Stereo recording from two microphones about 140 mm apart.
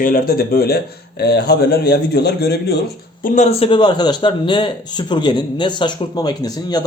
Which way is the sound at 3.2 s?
55° left (ahead or behind).